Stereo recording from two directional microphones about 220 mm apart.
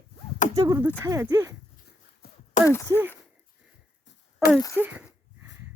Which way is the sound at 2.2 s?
45° left (ahead or behind).